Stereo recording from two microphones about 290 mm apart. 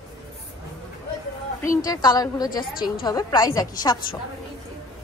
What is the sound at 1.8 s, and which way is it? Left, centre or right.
A woman's voice, centre.